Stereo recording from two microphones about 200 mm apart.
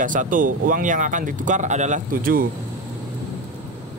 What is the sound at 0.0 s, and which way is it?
Speech, 40° right (ahead or behind).